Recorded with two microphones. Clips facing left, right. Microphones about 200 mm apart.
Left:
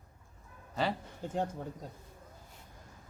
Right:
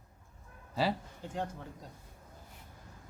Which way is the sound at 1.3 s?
40° left (ahead or behind).